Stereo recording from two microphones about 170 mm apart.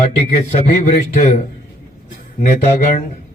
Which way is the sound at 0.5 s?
40° left (ahead or behind).